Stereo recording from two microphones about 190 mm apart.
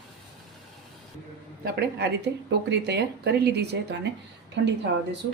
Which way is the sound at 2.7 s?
60° right (ahead or behind).